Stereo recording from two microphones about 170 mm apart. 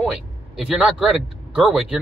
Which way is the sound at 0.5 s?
5° right (ahead or behind).